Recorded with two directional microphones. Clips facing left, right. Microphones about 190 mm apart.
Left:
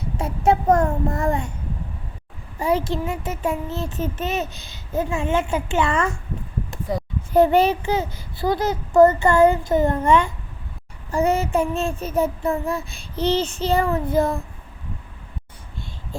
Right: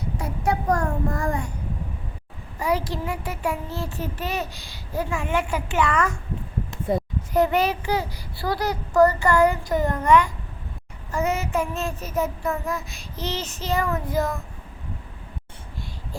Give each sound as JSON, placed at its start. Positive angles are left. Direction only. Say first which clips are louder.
{"t": 0.2, "sound": "child singing", "louder": "left 7 dB", "side_deg": 25}
{"t": 2.6, "sound": "child singing", "louder": "left 3 dB", "side_deg": 25}
{"t": 6.9, "sound": "a sound", "louder": "right 2 dB", "side_deg": -25}
{"t": 7.3, "sound": "child singing", "louder": "left 5 dB", "side_deg": 30}